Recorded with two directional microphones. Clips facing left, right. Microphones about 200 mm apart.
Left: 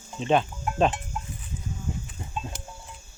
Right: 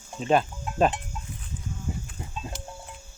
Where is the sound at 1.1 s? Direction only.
60° left (ahead or behind).